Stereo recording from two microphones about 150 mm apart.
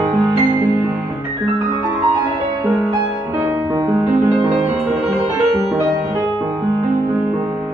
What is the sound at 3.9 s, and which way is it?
Music, 25° right (ahead or behind).